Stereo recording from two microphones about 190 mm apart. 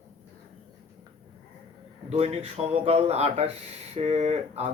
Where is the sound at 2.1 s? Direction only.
35° right (ahead or behind).